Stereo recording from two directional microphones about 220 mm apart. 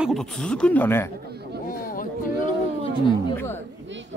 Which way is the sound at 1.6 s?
40° left (ahead or behind).